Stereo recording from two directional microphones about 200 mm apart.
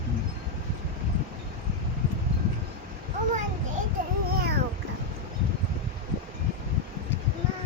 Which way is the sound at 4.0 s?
45° right (ahead or behind).